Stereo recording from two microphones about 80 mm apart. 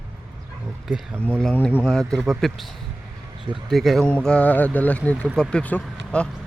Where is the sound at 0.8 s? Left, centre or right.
Centre.